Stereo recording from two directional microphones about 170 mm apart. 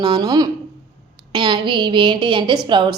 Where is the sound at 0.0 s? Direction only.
25° right (ahead or behind).